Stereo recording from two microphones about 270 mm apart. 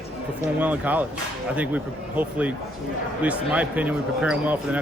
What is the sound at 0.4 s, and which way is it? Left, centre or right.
A man's voice, centre.